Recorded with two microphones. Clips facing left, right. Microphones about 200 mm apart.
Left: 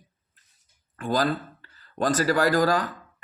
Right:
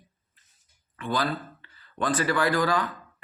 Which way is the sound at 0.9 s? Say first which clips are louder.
Left 4 dB; 45° left (ahead or behind).